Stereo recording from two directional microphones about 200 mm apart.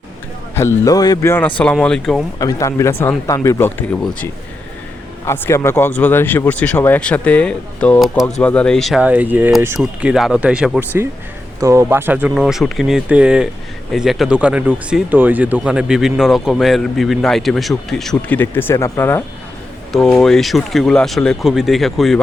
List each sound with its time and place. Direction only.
0.5 s speech: 15° left (ahead or behind)
2.4 s speech: 15° left (ahead or behind)
19.9 s speech: centre (ahead or behind)